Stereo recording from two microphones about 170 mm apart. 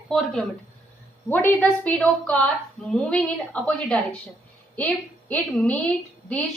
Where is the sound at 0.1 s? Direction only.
Centre (ahead or behind).